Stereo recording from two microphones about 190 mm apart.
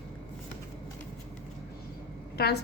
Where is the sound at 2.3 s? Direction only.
55° left (ahead or behind).